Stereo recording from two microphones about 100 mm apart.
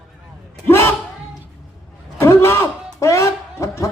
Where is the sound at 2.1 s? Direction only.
25° left (ahead or behind).